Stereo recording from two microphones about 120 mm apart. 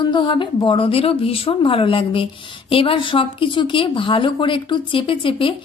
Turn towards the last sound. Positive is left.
turn(degrees=45)  # may be behind; listen again after turning